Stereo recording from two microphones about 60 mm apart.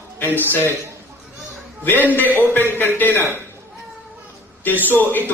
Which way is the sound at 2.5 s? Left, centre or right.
Left.